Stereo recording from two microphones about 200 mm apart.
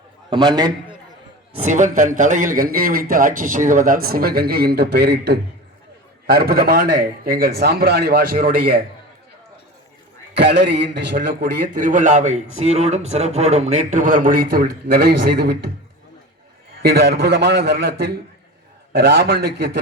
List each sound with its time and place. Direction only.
0.3 s a man's voice: 20° right (ahead or behind)
1.5 s a man's voice: 35° right (ahead or behind)
10.3 s a man's voice: 55° right (ahead or behind)
16.8 s a man's voice: 50° right (ahead or behind)